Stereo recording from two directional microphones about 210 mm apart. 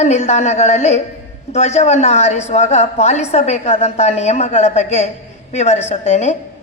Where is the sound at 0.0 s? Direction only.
30° left (ahead or behind).